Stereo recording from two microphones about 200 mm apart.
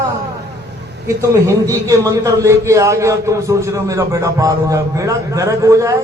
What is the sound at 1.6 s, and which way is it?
A man's voice, 15° right (ahead or behind).